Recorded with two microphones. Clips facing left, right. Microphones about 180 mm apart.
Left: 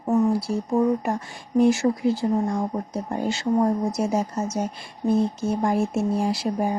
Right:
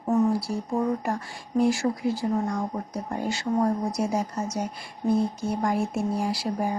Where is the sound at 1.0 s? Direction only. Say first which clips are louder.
Left 3 dB; 20° left (ahead or behind).